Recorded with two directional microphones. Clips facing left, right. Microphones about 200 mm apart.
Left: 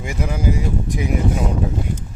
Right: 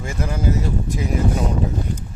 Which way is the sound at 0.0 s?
15° left (ahead or behind).